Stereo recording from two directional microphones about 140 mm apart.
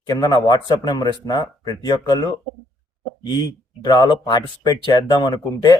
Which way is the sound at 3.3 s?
30° left (ahead or behind).